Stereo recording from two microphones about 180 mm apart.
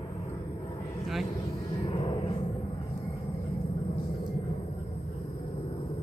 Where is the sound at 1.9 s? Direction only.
25° left (ahead or behind).